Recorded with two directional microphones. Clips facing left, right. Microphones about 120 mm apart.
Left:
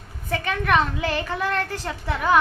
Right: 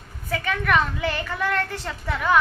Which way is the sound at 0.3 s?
25° left (ahead or behind).